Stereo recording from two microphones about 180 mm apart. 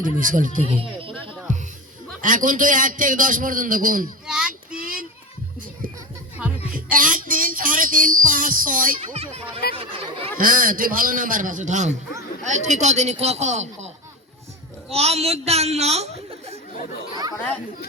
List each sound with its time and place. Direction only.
0.0 s a man's voice: 45° right (ahead or behind)
1.5 s music: 45° right (ahead or behind)
2.2 s a man's voice: 45° right (ahead or behind)
4.3 s child singing: 5° right (ahead or behind)
6.4 s music: 5° right (ahead or behind)
6.7 s a sound: 50° right (ahead or behind)
9.0 s speech: 35° right (ahead or behind)
9.7 s chatter: 30° right (ahead or behind)
10.3 s a man's voice: 50° right (ahead or behind)